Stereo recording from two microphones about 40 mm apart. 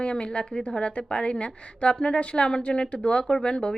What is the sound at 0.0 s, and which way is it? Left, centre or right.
A woman's voice, left.